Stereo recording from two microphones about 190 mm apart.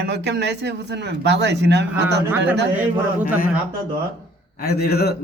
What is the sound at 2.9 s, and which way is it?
Speech, 10° right (ahead or behind).